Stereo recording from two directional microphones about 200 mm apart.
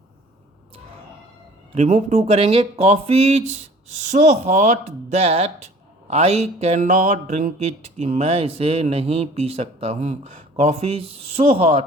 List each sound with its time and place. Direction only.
1.7 s music: 35° right (ahead or behind)